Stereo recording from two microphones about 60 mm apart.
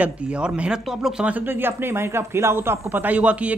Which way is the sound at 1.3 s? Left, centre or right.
Right.